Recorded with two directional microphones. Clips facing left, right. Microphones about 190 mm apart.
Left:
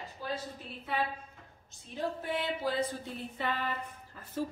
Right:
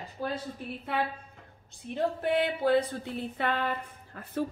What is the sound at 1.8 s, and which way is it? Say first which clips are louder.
A woman's voice: right 6 dB; 65° right (ahead or behind).